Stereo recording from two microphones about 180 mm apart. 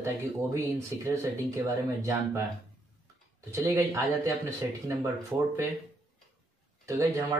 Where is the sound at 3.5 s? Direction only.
15° right (ahead or behind).